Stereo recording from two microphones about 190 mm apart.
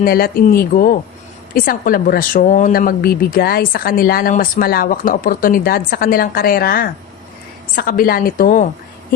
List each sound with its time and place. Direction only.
0.0 s speech: 50° left (ahead or behind)